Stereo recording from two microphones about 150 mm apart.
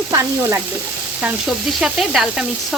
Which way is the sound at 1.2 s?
5° right (ahead or behind).